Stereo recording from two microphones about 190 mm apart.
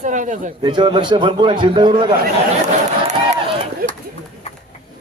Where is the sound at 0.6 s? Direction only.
25° right (ahead or behind).